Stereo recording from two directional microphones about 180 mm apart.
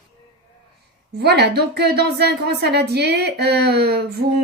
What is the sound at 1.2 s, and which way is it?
A woman's voice, 65° right (ahead or behind).